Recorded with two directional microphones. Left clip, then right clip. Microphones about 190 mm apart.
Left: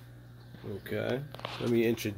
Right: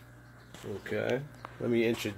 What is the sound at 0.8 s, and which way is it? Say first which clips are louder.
Speech: right 2 dB; 5° left (ahead or behind).